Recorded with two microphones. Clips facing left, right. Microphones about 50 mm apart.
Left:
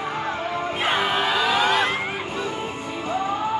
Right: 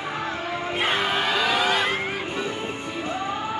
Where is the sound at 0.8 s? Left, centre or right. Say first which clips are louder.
Left 1 dB; centre.